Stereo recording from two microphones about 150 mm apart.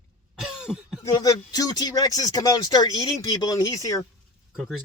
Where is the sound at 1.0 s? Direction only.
25° left (ahead or behind).